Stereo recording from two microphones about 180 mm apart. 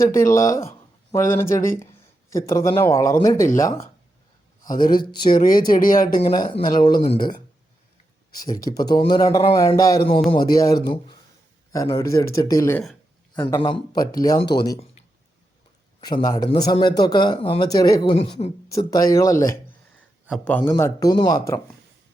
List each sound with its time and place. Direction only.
0.2 s speech: 15° left (ahead or behind)
4.8 s speech: 50° left (ahead or behind)
6.1 s speech: 25° left (ahead or behind)
12.8 s a sound: centre (ahead or behind)
13.4 s speech: 25° left (ahead or behind)
16.0 s speech: 20° left (ahead or behind)
18.0 s a woman's voice: 30° left (ahead or behind)
18.7 s speech: 20° left (ahead or behind)